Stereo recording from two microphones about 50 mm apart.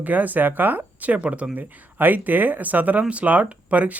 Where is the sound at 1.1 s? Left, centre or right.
Right.